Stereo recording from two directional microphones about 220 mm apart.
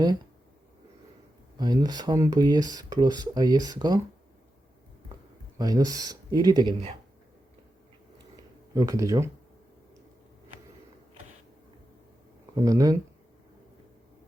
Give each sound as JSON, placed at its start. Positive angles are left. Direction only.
{"t": 1.5, "sound": "speech", "side_deg": -20}
{"t": 5.5, "sound": "speech", "side_deg": -15}
{"t": 8.7, "sound": "speech", "side_deg": -15}
{"t": 12.5, "sound": "speech", "side_deg": -15}